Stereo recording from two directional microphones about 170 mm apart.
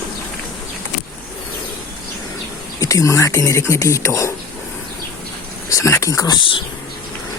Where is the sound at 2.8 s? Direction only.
20° left (ahead or behind).